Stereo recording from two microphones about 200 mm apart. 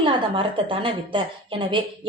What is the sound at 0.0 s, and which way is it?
A woman's voice, 25° right (ahead or behind).